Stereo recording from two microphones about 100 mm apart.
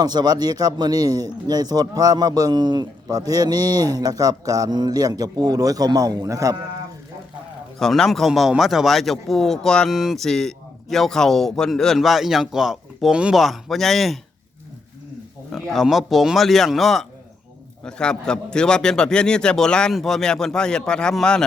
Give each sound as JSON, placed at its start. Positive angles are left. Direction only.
{"t": 0.0, "sound": "speech", "side_deg": -45}
{"t": 7.8, "sound": "a man's voice", "side_deg": 5}
{"t": 15.5, "sound": "a man's voice", "side_deg": 0}